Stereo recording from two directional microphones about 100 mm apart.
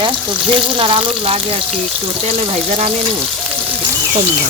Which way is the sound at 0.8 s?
60° right (ahead or behind).